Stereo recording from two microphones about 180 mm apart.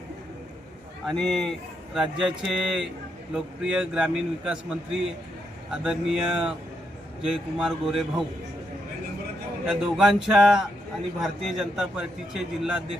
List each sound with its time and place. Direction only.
1.0 s speech: 5° left (ahead or behind)
7.6 s speech: centre (ahead or behind)
9.6 s speech: 5° right (ahead or behind)